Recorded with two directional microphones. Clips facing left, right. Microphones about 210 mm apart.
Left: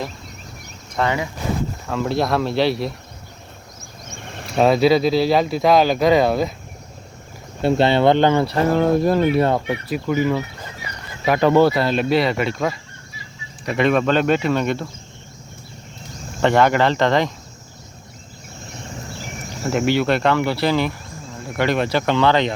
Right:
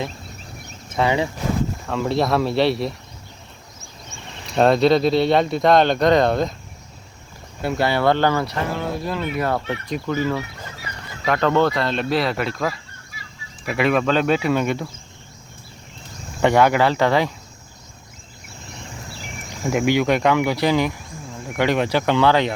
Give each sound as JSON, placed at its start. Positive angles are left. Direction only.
{"t": 1.0, "sound": "speech", "side_deg": -5}
{"t": 4.3, "sound": "a sound", "side_deg": 55}
{"t": 4.5, "sound": "speech", "side_deg": 5}
{"t": 7.6, "sound": "speech", "side_deg": 25}
{"t": 8.7, "sound": "speech", "side_deg": 50}
{"t": 9.7, "sound": "speech", "side_deg": 15}
{"t": 16.4, "sound": "speech", "side_deg": -10}
{"t": 19.6, "sound": "speech", "side_deg": -10}